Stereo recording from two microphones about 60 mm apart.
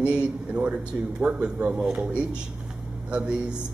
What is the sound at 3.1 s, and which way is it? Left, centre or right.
Speech, centre.